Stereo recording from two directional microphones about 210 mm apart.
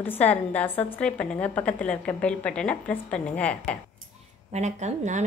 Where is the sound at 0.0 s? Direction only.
10° left (ahead or behind).